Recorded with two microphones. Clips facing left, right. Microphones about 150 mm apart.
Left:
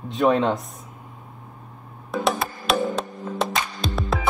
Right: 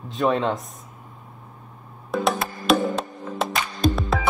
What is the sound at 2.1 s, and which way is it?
Music, centre (ahead or behind).